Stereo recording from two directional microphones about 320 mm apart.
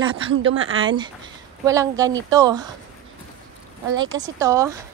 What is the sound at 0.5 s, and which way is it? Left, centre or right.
Speech, right.